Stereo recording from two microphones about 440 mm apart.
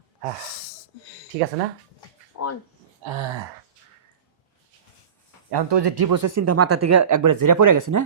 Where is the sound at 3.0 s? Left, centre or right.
Right.